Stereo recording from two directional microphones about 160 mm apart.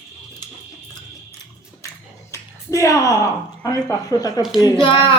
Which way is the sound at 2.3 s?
20° left (ahead or behind).